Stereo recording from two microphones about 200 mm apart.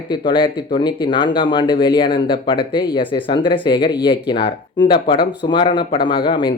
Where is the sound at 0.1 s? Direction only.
25° left (ahead or behind).